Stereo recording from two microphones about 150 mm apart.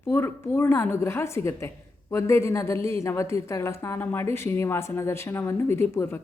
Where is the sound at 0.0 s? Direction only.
15° left (ahead or behind).